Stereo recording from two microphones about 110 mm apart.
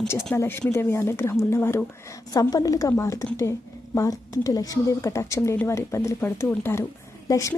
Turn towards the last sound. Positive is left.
turn(degrees=30)  # may be behind; listen again after turning